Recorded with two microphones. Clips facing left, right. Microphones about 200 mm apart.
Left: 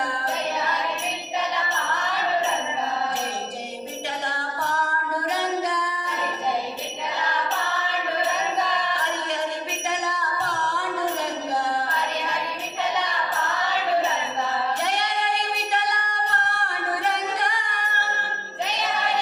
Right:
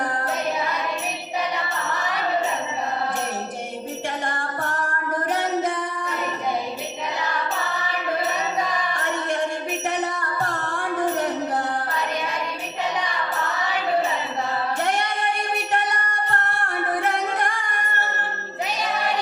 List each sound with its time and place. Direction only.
4.3 s music: 50° right (ahead or behind)
10.0 s music: 50° right (ahead or behind)
14.8 s music: 50° right (ahead or behind)